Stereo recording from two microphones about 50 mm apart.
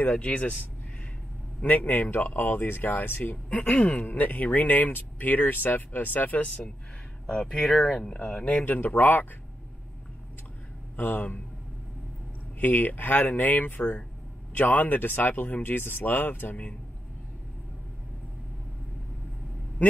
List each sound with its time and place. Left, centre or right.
0.0 s speech: left
1.6 s speech: left
7.2 s speech: centre
8.1 s speech: left
11.0 s speech: left
12.5 s speech: left